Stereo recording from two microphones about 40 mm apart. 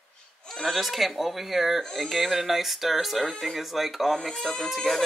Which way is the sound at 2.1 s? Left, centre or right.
Centre.